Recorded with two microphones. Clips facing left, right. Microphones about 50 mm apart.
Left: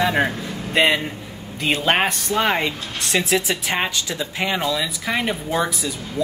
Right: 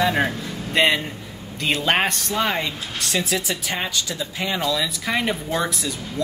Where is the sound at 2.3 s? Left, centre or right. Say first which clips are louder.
Left 3 dB; left.